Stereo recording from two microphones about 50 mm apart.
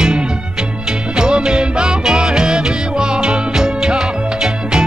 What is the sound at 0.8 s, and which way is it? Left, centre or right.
Music, centre.